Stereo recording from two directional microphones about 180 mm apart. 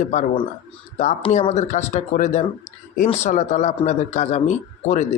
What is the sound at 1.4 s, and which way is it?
A man's voice, 40° left (ahead or behind).